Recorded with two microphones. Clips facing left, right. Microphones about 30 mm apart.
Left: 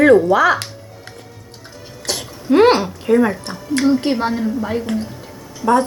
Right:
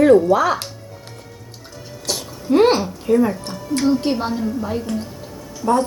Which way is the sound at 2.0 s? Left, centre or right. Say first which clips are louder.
Left 1 dB; left.